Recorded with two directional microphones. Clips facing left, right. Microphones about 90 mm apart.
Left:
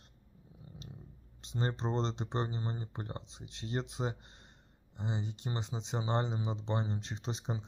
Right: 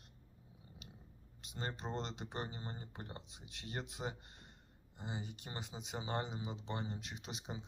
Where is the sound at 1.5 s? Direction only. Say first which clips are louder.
Left 8 dB; 30° left (ahead or behind).